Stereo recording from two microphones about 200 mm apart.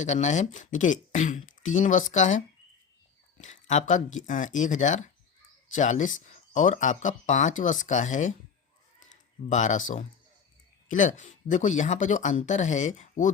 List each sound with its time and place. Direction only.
0.0 s speech: 35° left (ahead or behind)
9.0 s a sound: 40° left (ahead or behind)
10.8 s speech: 40° left (ahead or behind)